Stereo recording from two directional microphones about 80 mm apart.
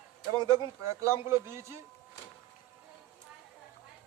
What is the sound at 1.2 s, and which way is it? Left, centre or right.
Speech, right.